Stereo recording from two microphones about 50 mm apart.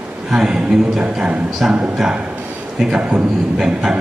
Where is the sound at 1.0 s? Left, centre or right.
Right.